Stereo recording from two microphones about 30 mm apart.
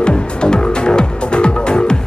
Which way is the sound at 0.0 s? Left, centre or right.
Left.